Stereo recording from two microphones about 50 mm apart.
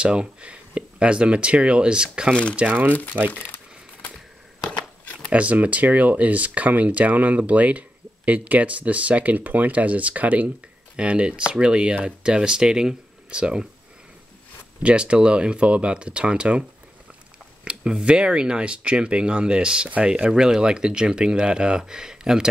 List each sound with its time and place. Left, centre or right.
0.0 s speech: right
2.5 s speech: right
3.3 s crumpling: left
5.3 s speech: right
14.8 s speech: right
17.6 s speech: right
20.2 s speech: centre